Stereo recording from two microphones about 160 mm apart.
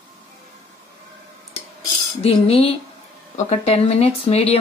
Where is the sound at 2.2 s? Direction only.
40° left (ahead or behind).